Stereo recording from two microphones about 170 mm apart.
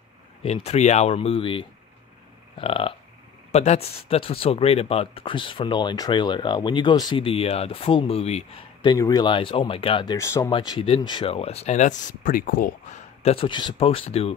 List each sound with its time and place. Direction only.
0.4 s speech: 35° left (ahead or behind)
8.8 s speech: 25° left (ahead or behind)
10.1 s speech: 15° left (ahead or behind)
10.5 s speech: 25° left (ahead or behind); by 12.7 s 55° left (ahead or behind)
13.2 s speech: 35° left (ahead or behind)